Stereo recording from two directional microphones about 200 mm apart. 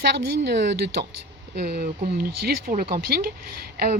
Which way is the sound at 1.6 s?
55° right (ahead or behind).